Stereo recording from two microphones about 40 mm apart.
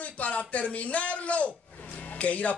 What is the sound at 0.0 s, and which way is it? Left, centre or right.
Speech, left.